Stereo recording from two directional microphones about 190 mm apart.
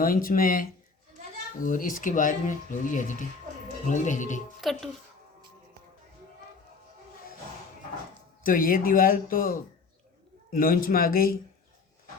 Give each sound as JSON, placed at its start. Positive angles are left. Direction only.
{"t": 0.0, "sound": "speech", "side_deg": 50}
{"t": 4.6, "sound": "speech", "side_deg": 0}
{"t": 8.4, "sound": "speech", "side_deg": 50}